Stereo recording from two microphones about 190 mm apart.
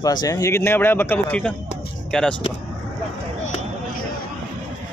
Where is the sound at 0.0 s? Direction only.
20° left (ahead or behind); by 2.3 s 5° left (ahead or behind).